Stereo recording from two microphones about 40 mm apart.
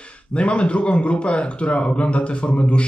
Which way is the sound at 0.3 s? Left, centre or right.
Left.